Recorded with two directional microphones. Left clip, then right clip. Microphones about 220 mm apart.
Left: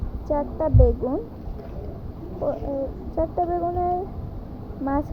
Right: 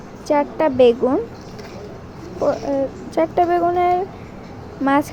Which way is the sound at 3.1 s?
45° right (ahead or behind).